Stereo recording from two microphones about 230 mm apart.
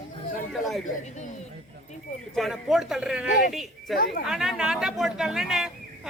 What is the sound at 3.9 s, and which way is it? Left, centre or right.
Speech, left.